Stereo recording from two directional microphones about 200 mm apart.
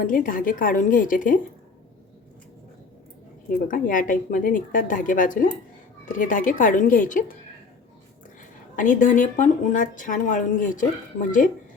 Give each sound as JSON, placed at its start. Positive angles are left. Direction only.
{"t": 0.0, "sound": "speech", "side_deg": 45}
{"t": 3.7, "sound": "a woman's voice", "side_deg": 40}
{"t": 8.7, "sound": "a woman's voice", "side_deg": 40}